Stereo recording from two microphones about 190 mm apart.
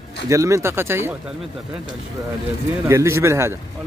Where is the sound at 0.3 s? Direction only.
15° right (ahead or behind).